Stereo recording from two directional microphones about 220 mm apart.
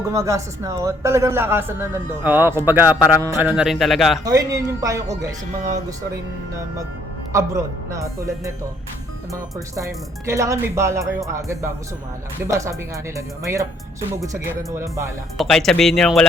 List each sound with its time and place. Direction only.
0.1 s a man's voice: 15° right (ahead or behind)
4.2 s a man's voice: 15° right (ahead or behind)
7.3 s a man's voice: 15° right (ahead or behind)
15.4 s speech: centre (ahead or behind)